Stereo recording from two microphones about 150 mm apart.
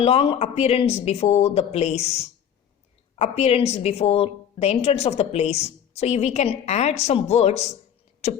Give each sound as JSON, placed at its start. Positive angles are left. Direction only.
{"t": 0.0, "sound": "a woman's voice", "side_deg": 40}